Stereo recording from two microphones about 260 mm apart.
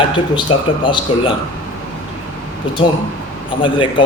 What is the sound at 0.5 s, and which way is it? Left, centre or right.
Speech, centre.